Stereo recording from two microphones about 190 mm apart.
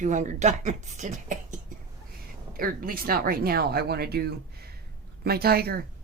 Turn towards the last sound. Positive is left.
turn(degrees=-55)  # may be behind; listen again after turning